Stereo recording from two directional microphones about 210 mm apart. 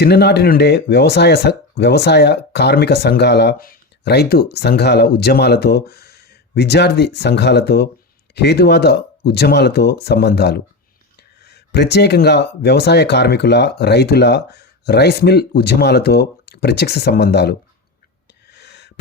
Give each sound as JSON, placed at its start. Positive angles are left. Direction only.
{"t": 0.0, "sound": "speech", "side_deg": 50}
{"t": 18.4, "sound": "gasp", "side_deg": 55}